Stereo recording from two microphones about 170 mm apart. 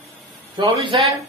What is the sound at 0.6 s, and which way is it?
Speech, 30° right (ahead or behind).